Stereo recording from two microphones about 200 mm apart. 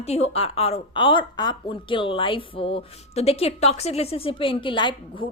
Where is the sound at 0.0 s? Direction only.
30° left (ahead or behind).